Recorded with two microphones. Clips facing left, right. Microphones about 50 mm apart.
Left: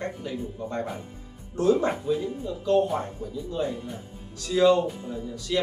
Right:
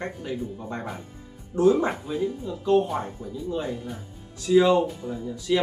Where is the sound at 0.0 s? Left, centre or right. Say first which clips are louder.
Right 1 dB; centre.